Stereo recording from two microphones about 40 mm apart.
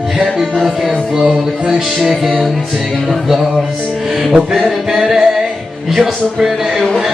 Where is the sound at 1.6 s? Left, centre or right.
Centre.